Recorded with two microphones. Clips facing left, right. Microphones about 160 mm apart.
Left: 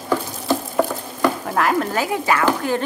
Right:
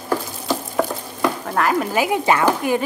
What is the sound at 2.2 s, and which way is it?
Speech, 20° right (ahead or behind).